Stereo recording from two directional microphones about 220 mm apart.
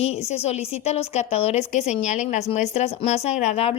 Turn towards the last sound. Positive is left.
turn(degrees=25)  # may be behind; listen again after turning